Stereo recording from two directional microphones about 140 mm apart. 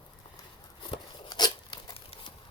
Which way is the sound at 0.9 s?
30° left (ahead or behind).